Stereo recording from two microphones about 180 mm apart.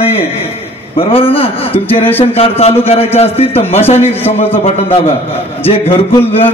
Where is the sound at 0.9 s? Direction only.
30° left (ahead or behind).